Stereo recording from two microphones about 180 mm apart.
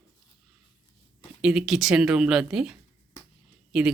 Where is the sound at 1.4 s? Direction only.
5° right (ahead or behind).